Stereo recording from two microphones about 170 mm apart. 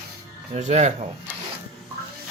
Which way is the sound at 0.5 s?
45° right (ahead or behind).